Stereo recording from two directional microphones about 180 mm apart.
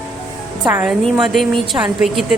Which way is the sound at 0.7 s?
10° right (ahead or behind).